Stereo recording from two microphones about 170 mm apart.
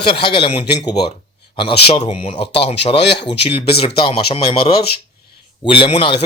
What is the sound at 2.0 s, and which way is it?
A man's voice, 40° left (ahead or behind).